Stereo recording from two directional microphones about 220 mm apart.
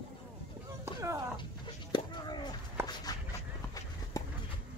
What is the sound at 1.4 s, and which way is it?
Chicken, 20° left (ahead or behind).